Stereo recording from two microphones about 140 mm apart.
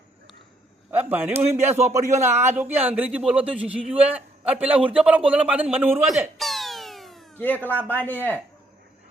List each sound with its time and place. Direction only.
0.9 s speech: 15° right (ahead or behind)
1.3 s a man's voice: 50° right (ahead or behind)
2.7 s a man's voice: 10° right (ahead or behind)
6.1 s a sound: centre (ahead or behind)
7.3 s speech: 10° left (ahead or behind)